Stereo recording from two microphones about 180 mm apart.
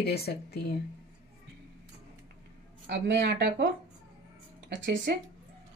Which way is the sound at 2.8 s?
75° right (ahead or behind).